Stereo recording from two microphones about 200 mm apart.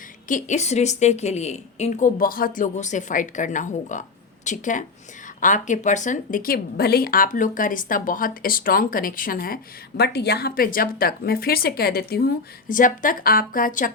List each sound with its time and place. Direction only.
0.3 s a woman's voice: 40° left (ahead or behind)